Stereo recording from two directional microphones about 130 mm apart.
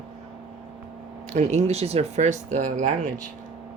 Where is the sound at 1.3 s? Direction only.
60° right (ahead or behind).